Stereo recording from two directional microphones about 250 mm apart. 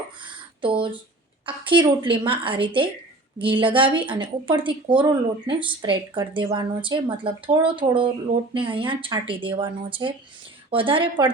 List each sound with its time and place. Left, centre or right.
0.6 s speech: centre